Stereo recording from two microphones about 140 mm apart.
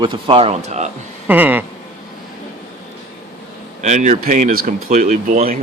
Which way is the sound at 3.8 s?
55° right (ahead or behind).